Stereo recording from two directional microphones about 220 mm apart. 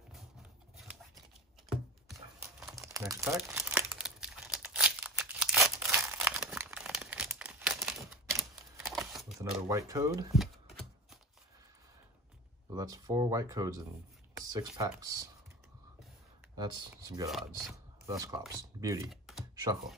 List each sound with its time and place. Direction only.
0.7 s a sound: centre (ahead or behind)
2.8 s speech: 15° right (ahead or behind)
3.3 s crumpling: 5° right (ahead or behind)
8.4 s a sound: centre (ahead or behind)
9.4 s speech: 15° right (ahead or behind)
10.3 s shuffling cards: centre (ahead or behind)
12.7 s speech: 15° right (ahead or behind)
14.4 s a sound: 15° right (ahead or behind)
14.8 s speech: 15° right (ahead or behind)
17.3 s speech: centre (ahead or behind)
18.0 s speech: 15° right (ahead or behind)
19.0 s computer keyboard: centre (ahead or behind)
19.5 s computer keyboard: 20° right (ahead or behind)